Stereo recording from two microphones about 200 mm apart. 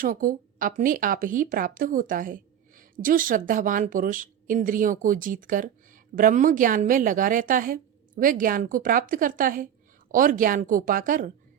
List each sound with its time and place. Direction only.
0.0 s speech: 45° right (ahead or behind)